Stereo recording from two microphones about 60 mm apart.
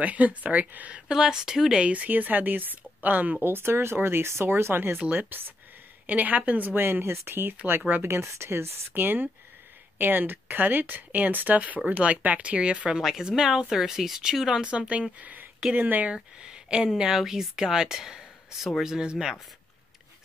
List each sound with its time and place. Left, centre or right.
0.0 s speech: right
1.1 s speech: centre; by 3.3 s right
3.4 s speech: right
6.0 s a woman's voice: right
13.0 s a woman's voice: centre